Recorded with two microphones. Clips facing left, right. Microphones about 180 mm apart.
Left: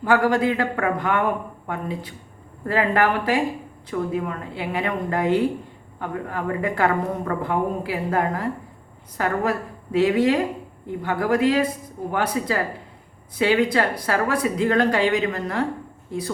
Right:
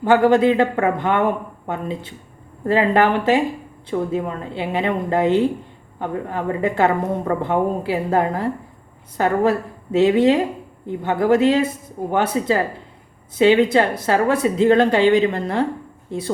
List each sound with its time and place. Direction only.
0.0 s a woman's voice: 25° right (ahead or behind)